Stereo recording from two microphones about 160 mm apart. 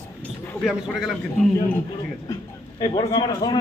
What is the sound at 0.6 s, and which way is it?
Speech, centre (ahead or behind).